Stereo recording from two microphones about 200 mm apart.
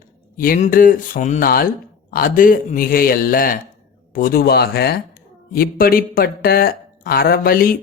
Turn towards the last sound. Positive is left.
turn(degrees=45)  # may be behind; listen again after turning